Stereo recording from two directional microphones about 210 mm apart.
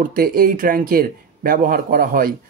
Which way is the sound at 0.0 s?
45° right (ahead or behind).